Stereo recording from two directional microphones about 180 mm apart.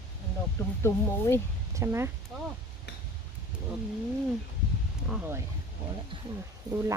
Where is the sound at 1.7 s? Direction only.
15° right (ahead or behind).